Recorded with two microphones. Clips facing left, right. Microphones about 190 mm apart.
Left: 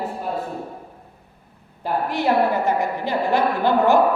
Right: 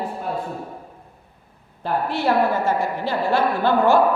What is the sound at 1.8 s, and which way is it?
Speech, 15° left (ahead or behind).